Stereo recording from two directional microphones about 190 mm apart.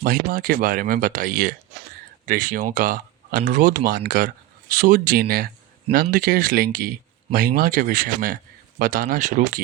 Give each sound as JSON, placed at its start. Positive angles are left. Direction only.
{"t": 0.0, "sound": "speech", "side_deg": -50}